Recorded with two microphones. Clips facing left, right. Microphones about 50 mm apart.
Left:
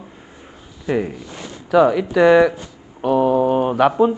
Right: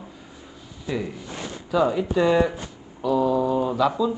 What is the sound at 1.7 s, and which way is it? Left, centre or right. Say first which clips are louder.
Speech: left 7 dB; left.